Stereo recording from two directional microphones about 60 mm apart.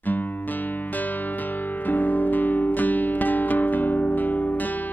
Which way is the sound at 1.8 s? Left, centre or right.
Left.